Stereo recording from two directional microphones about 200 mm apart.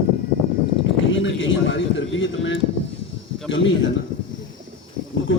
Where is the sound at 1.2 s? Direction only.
70° left (ahead or behind).